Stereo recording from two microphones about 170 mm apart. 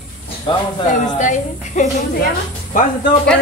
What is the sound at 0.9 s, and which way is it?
A woman's voice, 50° left (ahead or behind).